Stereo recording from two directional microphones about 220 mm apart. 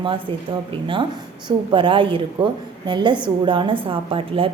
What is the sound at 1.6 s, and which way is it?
A woman's voice, 20° right (ahead or behind).